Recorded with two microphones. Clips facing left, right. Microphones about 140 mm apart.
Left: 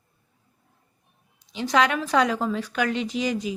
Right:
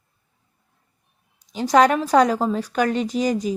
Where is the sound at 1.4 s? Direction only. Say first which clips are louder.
Right 6 dB; 45° right (ahead or behind).